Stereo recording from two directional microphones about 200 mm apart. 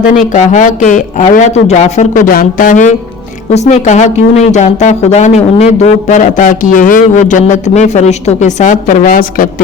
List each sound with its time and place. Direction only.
0.2 s speech: 40° left (ahead or behind)